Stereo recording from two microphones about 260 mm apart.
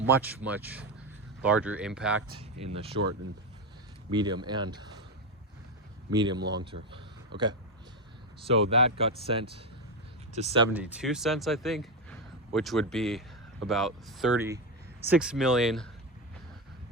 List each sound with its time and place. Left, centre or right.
0.0 s speech: centre
2.7 s speech: right
4.1 s speech: centre
6.1 s speech: centre
7.3 s speech: right
8.4 s speech: right
10.8 s speech: centre